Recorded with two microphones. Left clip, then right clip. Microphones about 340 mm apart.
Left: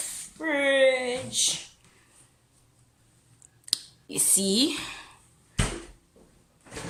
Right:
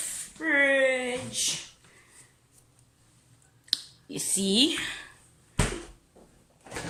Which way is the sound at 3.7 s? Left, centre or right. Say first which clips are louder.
Even; centre.